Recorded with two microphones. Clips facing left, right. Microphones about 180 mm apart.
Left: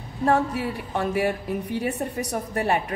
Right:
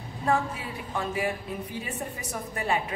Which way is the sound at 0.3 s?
70° left (ahead or behind).